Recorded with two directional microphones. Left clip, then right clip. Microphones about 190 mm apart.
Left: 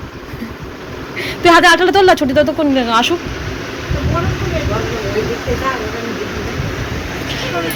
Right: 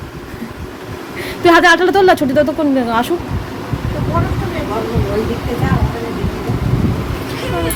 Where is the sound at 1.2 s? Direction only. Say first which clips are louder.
Left 1 dB; 10° right (ahead or behind).